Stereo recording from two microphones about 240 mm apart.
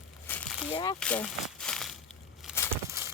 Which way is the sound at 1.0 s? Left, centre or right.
Centre.